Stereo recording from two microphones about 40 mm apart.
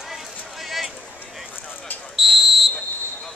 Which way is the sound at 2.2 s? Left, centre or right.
Centre.